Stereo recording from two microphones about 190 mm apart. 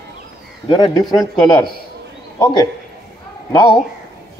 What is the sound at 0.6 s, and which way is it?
Speech, 25° left (ahead or behind).